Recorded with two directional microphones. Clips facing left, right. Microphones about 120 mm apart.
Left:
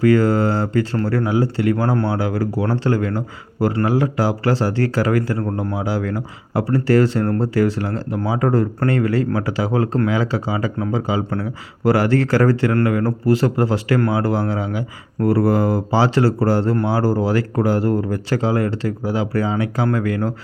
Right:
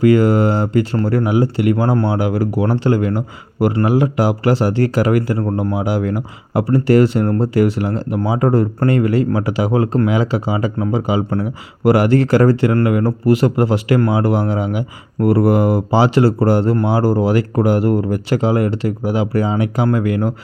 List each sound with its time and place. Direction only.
0.0 s speech: 15° right (ahead or behind)